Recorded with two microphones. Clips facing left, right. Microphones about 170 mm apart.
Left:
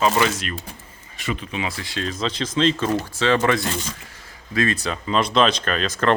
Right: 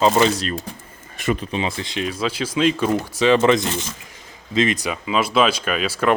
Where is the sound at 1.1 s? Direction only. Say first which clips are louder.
Right 6 dB; 50° right (ahead or behind).